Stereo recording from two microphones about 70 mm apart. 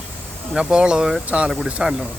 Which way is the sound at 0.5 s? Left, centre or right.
Centre.